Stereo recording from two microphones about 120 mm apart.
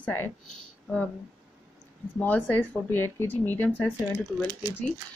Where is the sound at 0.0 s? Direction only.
20° left (ahead or behind).